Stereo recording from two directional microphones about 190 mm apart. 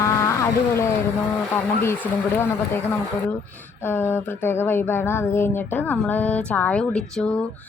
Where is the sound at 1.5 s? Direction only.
10° left (ahead or behind).